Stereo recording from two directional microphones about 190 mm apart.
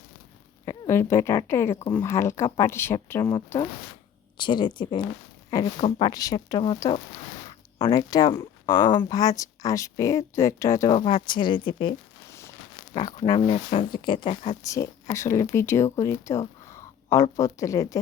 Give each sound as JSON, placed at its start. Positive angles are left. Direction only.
{"t": 0.6, "sound": "speech", "side_deg": 15}
{"t": 4.4, "sound": "speech", "side_deg": 25}
{"t": 10.9, "sound": "speech", "side_deg": 25}
{"t": 12.3, "sound": "a sound", "side_deg": 15}
{"t": 12.9, "sound": "speech", "side_deg": 25}